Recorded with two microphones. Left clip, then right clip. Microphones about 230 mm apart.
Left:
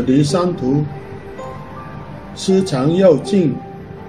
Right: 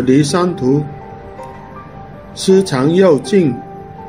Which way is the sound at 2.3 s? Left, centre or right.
Right.